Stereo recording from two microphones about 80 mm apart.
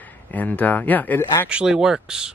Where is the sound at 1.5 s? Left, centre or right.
Centre.